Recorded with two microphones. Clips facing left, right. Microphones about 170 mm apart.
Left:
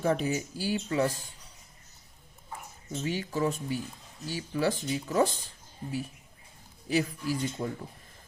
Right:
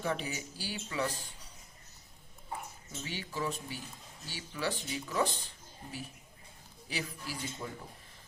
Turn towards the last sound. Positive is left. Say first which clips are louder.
# left 9 dB
turn(degrees=45)  # may be behind; listen again after turning